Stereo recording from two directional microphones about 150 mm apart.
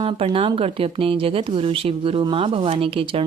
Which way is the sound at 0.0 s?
35° right (ahead or behind).